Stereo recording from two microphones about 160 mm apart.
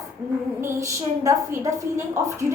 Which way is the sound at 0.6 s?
20° right (ahead or behind).